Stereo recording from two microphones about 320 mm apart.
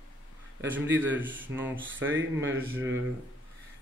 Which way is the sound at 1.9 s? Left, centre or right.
Right.